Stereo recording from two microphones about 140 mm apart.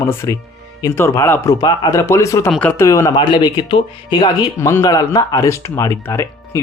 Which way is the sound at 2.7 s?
20° left (ahead or behind).